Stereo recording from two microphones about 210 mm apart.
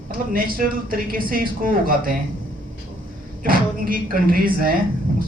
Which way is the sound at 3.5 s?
45° right (ahead or behind).